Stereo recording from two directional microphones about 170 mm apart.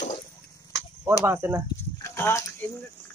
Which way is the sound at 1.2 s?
15° right (ahead or behind).